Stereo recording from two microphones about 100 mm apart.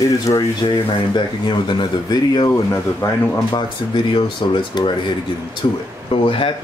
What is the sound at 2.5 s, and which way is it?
Speech, 25° left (ahead or behind).